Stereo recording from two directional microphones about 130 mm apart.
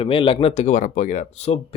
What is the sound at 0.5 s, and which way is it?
Speech, 65° left (ahead or behind).